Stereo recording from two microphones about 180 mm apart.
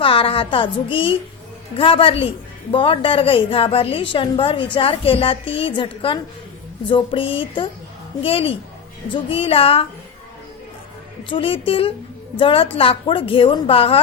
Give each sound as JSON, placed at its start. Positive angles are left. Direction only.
{"t": 0.0, "sound": "a woman's voice", "side_deg": 30}
{"t": 11.2, "sound": "a woman's voice", "side_deg": 30}